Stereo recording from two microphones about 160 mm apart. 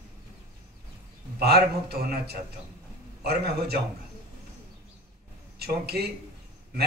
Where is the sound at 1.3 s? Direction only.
80° right.